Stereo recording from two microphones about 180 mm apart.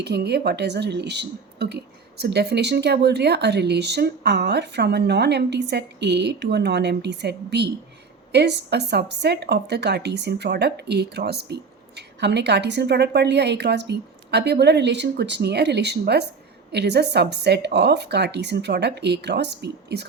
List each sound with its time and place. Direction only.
0.0 s a woman's voice: 65° right (ahead or behind)